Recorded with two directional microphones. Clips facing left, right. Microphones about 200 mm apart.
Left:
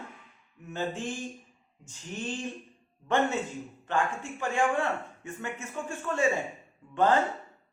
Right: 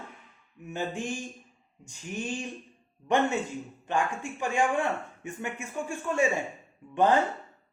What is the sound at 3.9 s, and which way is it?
A man's voice, 15° right (ahead or behind).